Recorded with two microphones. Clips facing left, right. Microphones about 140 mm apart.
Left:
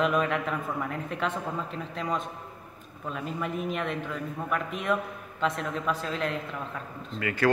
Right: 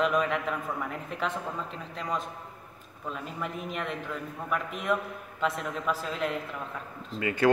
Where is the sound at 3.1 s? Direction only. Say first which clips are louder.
Left 4 dB; centre (ahead or behind).